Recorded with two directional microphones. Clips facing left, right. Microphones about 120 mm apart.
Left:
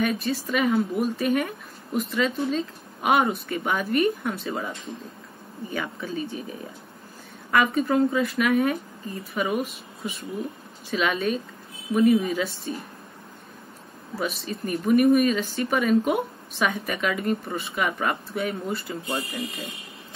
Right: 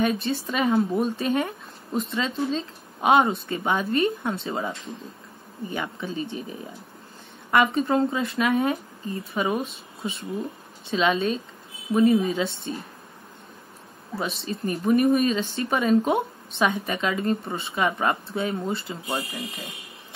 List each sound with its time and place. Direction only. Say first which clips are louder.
0.0 s speech: right 1 dB; 30° right (ahead or behind)
5.7 s speech: even; 20° right (ahead or behind)
7.5 s speech: right 1 dB; 25° right (ahead or behind)
14.1 s speech: even; 30° right (ahead or behind)